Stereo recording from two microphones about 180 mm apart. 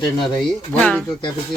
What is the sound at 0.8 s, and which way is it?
Speech, 5° left (ahead or behind).